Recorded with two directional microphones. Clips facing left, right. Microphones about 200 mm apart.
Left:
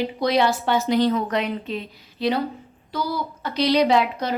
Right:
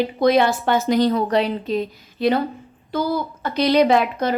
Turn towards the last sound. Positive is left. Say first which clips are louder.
# right 2 dB
turn(degrees=-50)  # may be behind; listen again after turning